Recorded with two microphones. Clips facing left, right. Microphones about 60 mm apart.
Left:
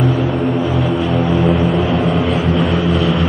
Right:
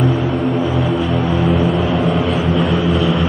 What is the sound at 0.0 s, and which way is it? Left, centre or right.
Music, centre.